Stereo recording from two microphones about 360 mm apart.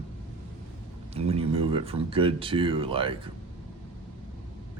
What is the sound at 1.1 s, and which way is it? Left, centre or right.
Speech, centre.